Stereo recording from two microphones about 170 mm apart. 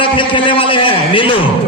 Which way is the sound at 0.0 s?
30° left (ahead or behind).